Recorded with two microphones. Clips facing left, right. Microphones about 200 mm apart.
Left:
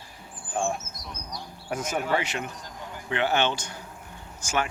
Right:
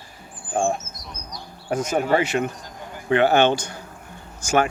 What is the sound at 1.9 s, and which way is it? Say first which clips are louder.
Speech: right 7 dB; 45° right (ahead or behind).